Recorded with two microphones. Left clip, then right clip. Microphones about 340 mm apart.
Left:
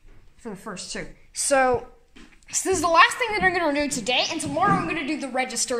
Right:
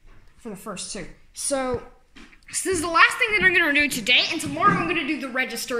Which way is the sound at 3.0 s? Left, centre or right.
Left.